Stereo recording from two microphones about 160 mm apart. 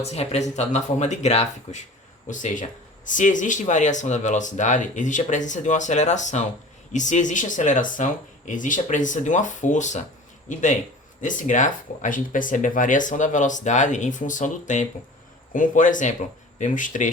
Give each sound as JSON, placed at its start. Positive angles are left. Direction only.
{"t": 0.0, "sound": "speech", "side_deg": 40}